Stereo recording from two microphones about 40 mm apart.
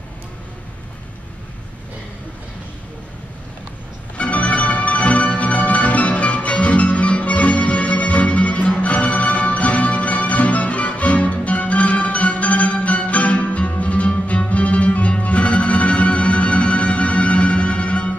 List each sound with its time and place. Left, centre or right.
4.2 s music: left